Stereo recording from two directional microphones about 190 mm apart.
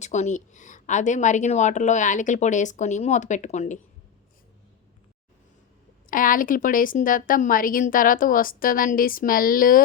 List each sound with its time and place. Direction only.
0.0 s a woman's voice: 35° left (ahead or behind)
6.1 s a woman's voice: 45° left (ahead or behind)